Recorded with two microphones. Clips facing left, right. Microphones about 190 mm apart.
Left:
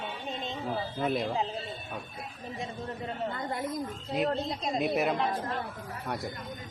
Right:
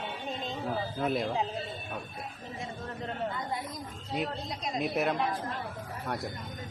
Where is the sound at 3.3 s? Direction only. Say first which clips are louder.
Left 1 dB; 55° left (ahead or behind).